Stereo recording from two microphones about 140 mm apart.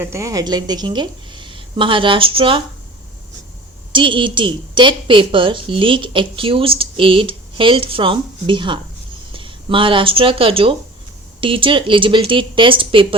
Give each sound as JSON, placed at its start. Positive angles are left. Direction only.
{"t": 0.0, "sound": "a woman's voice", "side_deg": -20}
{"t": 3.9, "sound": "a woman's voice", "side_deg": -35}